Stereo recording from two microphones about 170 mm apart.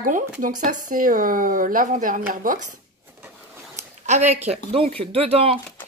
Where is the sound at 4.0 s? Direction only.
40° right (ahead or behind).